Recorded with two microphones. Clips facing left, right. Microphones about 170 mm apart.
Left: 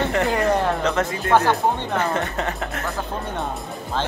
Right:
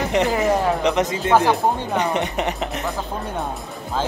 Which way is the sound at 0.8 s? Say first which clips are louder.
Right 2 dB; 20° right (ahead or behind).